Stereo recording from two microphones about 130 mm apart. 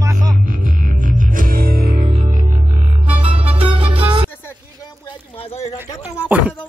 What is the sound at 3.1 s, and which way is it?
Music, 45° right (ahead or behind).